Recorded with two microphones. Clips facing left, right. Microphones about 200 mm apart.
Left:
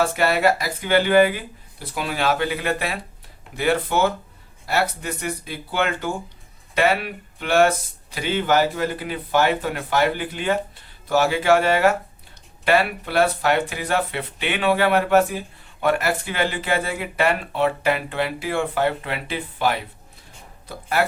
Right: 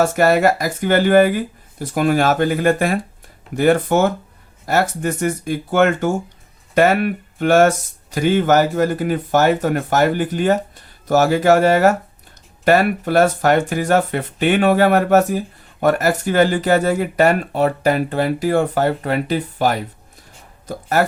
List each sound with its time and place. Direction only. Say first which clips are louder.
0.0 s speech: right 5 dB; 45° right (ahead or behind)